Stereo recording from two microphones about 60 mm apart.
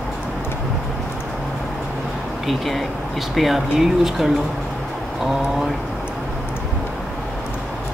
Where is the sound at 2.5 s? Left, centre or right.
Centre.